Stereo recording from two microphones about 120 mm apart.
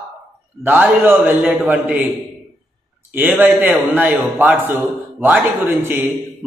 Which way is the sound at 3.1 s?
15° right (ahead or behind).